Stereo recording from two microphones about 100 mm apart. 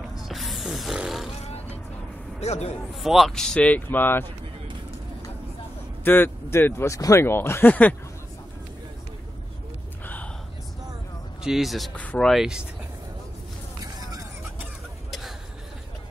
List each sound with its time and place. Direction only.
0.2 s a sound: centre (ahead or behind)
2.4 s a man's voice: 90° left
2.9 s speech: centre (ahead or behind); by 4.3 s 20° left (ahead or behind)
6.0 s speech: 20° left (ahead or behind)
10.0 s gasp: 15° left (ahead or behind)
11.4 s speech: centre (ahead or behind)
11.9 s speech: 15° left (ahead or behind)
12.3 s speech: 5° right (ahead or behind)
15.0 s a sound: centre (ahead or behind)